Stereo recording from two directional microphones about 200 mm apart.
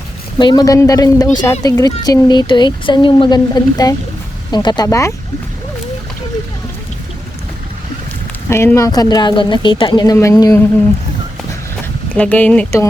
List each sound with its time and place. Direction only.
0.3 s speech: 20° left (ahead or behind)
8.4 s speech: 15° left (ahead or behind)
12.1 s speech: 5° left (ahead or behind)